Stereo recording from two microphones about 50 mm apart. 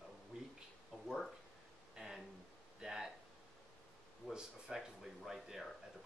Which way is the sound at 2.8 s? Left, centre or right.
Centre.